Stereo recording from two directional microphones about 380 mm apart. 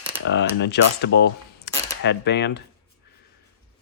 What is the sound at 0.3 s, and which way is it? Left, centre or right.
Speech, left.